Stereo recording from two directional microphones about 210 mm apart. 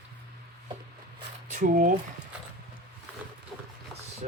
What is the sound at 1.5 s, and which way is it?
Speech, 40° right (ahead or behind).